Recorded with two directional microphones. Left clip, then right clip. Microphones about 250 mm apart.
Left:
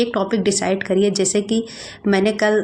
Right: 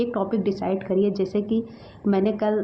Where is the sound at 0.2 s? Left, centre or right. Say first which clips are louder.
Left 6 dB; left.